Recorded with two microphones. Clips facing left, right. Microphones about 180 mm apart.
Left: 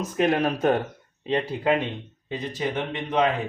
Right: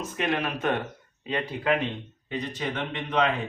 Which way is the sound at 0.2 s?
40° left (ahead or behind).